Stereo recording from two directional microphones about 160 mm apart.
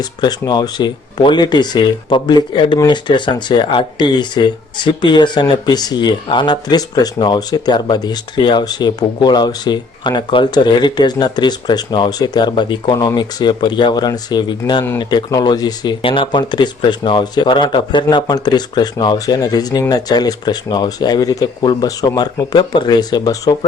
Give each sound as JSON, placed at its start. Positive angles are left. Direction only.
{"t": 0.0, "sound": "speech", "side_deg": 25}